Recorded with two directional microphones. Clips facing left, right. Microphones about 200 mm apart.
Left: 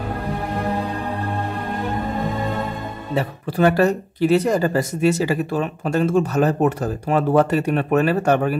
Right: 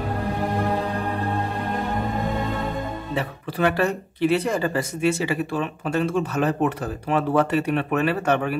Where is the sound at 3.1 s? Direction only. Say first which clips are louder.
Left 4 dB; 40° left (ahead or behind).